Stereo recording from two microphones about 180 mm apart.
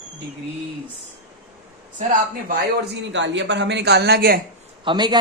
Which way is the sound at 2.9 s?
85° right.